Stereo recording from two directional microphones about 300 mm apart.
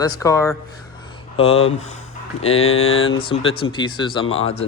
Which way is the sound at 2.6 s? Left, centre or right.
Left.